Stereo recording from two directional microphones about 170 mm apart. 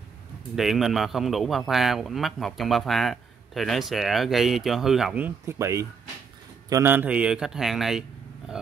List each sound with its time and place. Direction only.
0.6 s a man's voice: centre (ahead or behind)